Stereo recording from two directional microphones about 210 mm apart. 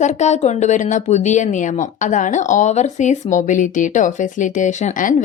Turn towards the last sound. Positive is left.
turn(degrees=35)  # may be behind; listen again after turning